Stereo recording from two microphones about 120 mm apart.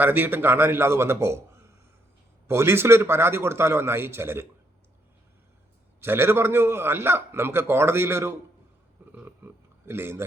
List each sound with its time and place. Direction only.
0.0 s a man's voice: 15° right (ahead or behind)
2.5 s a man's voice: 20° right (ahead or behind)
6.0 s a man's voice: 20° right (ahead or behind)
9.1 s a sound: 20° right (ahead or behind)